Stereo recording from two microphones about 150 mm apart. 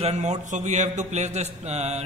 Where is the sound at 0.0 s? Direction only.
50° right (ahead or behind).